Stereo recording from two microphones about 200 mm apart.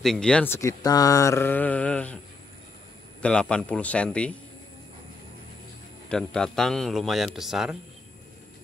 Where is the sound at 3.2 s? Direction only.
5° left (ahead or behind).